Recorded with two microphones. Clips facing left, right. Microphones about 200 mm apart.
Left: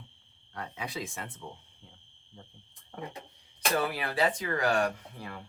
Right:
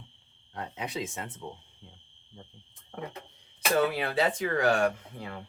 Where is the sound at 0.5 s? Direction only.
20° right (ahead or behind).